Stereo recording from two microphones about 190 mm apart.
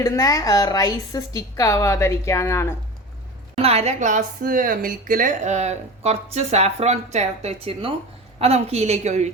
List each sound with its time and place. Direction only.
0.0 s a woman's voice: 20° left (ahead or behind)
3.6 s a woman's voice: 35° right (ahead or behind)